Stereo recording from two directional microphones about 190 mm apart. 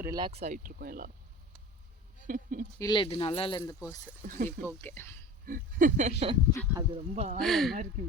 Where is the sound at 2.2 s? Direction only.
45° right (ahead or behind).